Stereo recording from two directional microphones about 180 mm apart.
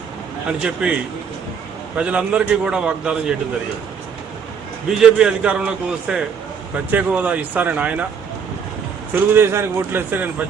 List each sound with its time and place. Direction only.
0.6 s a man's voice: 5° right (ahead or behind)
2.0 s a man's voice: 5° right (ahead or behind)
4.9 s a man's voice: 5° right (ahead or behind)
9.1 s speech: 10° right (ahead or behind)